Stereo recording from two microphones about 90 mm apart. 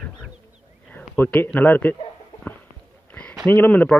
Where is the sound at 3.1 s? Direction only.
15° left (ahead or behind).